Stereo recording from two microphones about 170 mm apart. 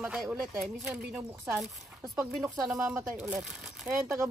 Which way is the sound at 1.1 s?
15° right (ahead or behind).